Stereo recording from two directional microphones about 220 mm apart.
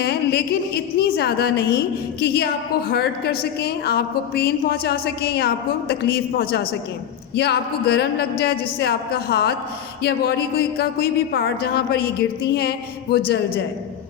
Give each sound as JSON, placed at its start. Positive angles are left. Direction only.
{"t": 0.0, "sound": "a sound", "side_deg": 45}
{"t": 0.9, "sound": "a woman's voice", "side_deg": 45}
{"t": 2.9, "sound": "a woman's voice", "side_deg": 45}